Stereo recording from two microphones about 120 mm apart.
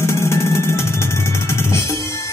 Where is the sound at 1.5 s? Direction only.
25° left (ahead or behind).